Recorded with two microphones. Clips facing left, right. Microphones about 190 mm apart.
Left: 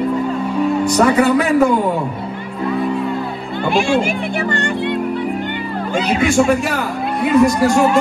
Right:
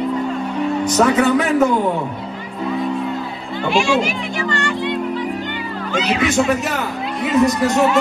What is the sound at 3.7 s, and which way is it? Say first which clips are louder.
Speech: left 1 dB; 55° left (ahead or behind).